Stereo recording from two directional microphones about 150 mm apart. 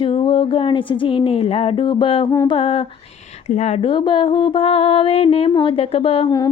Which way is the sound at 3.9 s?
35° left (ahead or behind).